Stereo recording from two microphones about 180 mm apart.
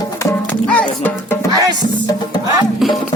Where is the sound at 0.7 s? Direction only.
10° left (ahead or behind).